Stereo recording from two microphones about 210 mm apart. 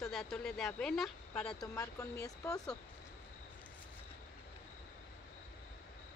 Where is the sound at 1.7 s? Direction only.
15° left (ahead or behind).